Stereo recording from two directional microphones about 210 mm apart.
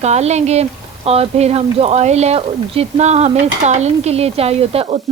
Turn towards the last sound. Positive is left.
turn(degrees=-30)  # may be behind; listen again after turning